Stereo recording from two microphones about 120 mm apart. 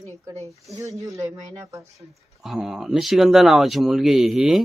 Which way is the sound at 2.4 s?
5° right (ahead or behind).